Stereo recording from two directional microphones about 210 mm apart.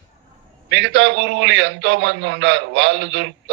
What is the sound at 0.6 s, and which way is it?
A man's voice, 60° right (ahead or behind).